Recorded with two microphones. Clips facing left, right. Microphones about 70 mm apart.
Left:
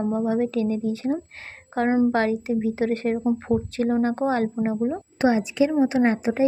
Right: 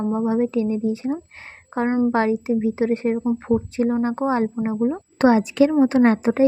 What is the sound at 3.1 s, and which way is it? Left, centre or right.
Speech, centre.